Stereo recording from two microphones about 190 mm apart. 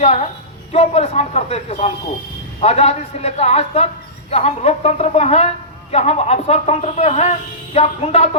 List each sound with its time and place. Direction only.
0.0 s speech: 35° left (ahead or behind)